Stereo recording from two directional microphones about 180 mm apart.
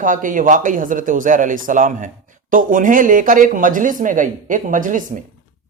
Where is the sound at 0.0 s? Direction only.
45° right (ahead or behind).